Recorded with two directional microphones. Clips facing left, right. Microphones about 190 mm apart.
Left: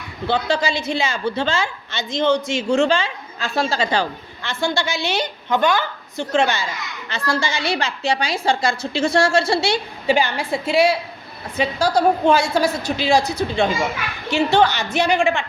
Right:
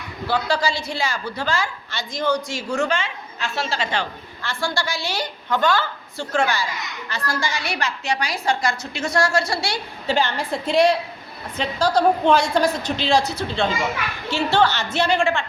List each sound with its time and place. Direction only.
0.3 s a woman's voice: 25° left (ahead or behind); by 4.0 s 40° left (ahead or behind)
4.4 s a woman's voice: 20° left (ahead or behind)